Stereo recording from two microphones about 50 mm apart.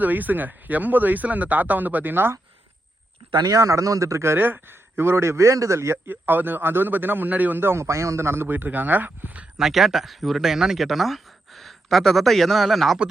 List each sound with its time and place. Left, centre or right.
0.0 s speech: right
3.6 s a man's voice: right
4.4 s a man's voice: right
6.1 s a man's voice: right
7.6 s a man's voice: right
7.9 s speech: right
9.6 s speech: centre